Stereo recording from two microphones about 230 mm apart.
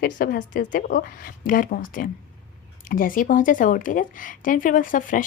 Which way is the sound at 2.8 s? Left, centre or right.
Left.